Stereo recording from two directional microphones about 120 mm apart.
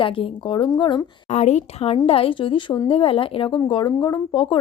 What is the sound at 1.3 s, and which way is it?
A woman's voice, 65° left (ahead or behind).